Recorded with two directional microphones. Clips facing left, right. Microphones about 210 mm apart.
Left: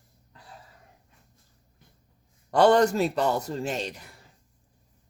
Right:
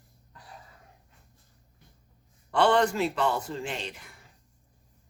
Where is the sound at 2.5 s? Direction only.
40° left (ahead or behind).